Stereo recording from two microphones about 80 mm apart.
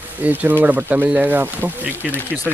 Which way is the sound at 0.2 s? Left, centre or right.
Right.